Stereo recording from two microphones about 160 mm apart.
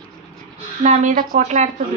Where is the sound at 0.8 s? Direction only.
50° right (ahead or behind).